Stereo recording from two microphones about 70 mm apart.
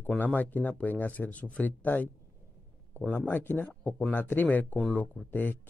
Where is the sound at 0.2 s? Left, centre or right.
Left.